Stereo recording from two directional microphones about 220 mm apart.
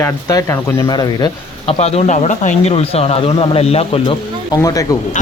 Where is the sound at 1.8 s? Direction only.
30° left (ahead or behind).